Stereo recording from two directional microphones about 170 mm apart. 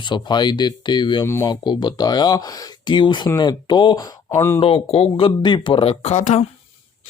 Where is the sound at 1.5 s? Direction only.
25° left (ahead or behind).